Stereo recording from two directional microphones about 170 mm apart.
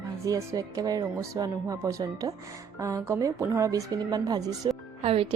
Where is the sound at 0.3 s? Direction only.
20° right (ahead or behind).